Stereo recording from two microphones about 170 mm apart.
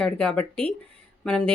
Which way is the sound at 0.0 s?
5° left (ahead or behind).